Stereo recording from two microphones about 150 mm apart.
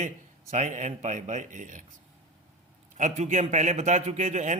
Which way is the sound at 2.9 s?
55° right (ahead or behind).